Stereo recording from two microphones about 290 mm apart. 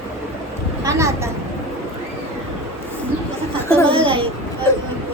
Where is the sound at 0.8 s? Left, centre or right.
Centre.